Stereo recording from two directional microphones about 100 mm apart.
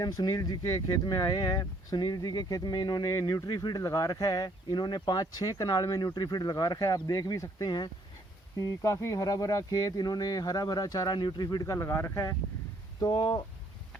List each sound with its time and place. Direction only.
0.0 s speech: 40° left (ahead or behind)
3.4 s speech: 45° left (ahead or behind)
11.4 s speech: 35° left (ahead or behind)
13.0 s speech: 45° left (ahead or behind)